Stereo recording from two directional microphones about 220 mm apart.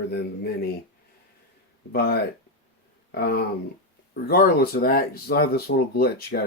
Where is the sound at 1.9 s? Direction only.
45° left (ahead or behind).